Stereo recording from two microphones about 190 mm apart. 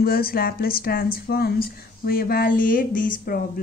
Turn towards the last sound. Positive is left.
turn(degrees=50)  # may be behind; listen again after turning